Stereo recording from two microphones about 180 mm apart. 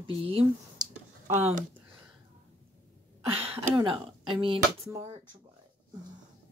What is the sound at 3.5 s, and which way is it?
Speech, 25° right (ahead or behind).